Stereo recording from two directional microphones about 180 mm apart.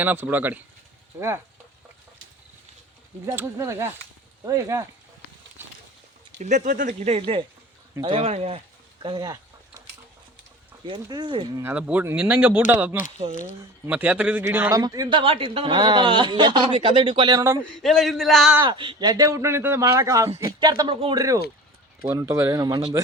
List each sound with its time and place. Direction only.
0.0 s speech: 10° right (ahead or behind)
3.2 s speech: 15° right (ahead or behind)
6.4 s speech: 45° right (ahead or behind); by 9.4 s 25° right (ahead or behind)
10.8 s a man's voice: 25° right (ahead or behind)
11.6 s a man's voice: 5° right (ahead or behind)
17.6 s speech: centre (ahead or behind)
18.6 s a man's voice: 25° right (ahead or behind)